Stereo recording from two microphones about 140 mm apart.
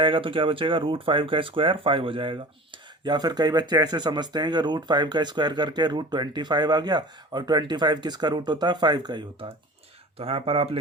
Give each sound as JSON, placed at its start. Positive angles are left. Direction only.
{"t": 0.0, "sound": "speech", "side_deg": -35}
{"t": 10.2, "sound": "speech", "side_deg": -40}